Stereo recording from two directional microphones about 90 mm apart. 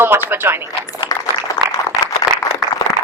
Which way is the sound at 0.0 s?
25° right (ahead or behind).